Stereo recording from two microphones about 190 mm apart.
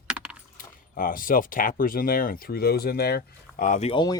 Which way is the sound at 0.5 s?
45° left (ahead or behind).